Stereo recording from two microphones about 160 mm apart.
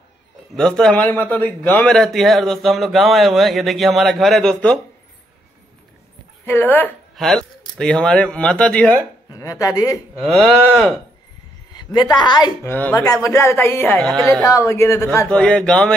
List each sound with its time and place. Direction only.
0.6 s a man's voice: 5° left (ahead or behind)
6.4 s a man's voice: 10° left (ahead or behind)
9.3 s speech: 20° left (ahead or behind)
10.2 s a man's voice: centre (ahead or behind)
11.7 s a woman's voice: 25° left (ahead or behind)
12.6 s speech: 10° left (ahead or behind)
14.0 s a man's voice: centre (ahead or behind)
14.4 s speech: 20° left (ahead or behind)
15.2 s a man's voice: 5° left (ahead or behind)